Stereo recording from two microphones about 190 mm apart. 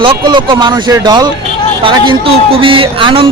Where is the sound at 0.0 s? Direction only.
25° right (ahead or behind).